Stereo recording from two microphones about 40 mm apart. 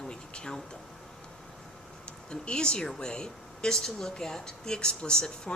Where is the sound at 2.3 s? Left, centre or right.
Left.